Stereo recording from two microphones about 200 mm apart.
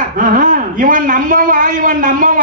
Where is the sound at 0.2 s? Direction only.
40° right (ahead or behind).